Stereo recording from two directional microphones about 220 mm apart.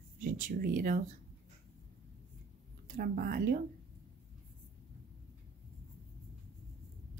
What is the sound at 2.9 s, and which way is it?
Speech, 40° right (ahead or behind).